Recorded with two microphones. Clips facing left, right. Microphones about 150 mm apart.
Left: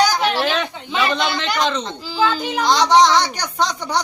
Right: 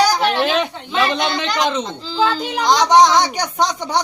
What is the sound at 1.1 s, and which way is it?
Speech, 10° right (ahead or behind).